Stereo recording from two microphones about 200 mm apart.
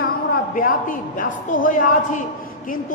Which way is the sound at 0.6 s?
45° left (ahead or behind).